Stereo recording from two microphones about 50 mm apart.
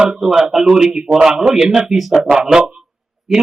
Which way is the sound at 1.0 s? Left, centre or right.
Right.